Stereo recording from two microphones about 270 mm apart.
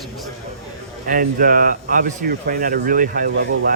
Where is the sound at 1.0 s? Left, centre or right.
Right.